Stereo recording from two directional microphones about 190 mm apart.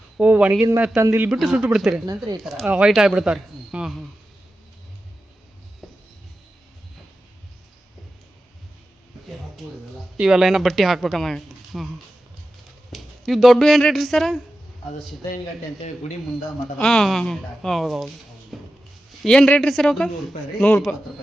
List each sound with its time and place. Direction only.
0.2 s speech: 5° right (ahead or behind)
1.3 s speech: centre (ahead or behind)
5.8 s music: centre (ahead or behind)
10.2 s speech: 5° right (ahead or behind)
12.9 s speech: centre (ahead or behind)
16.7 s speech: 5° left (ahead or behind)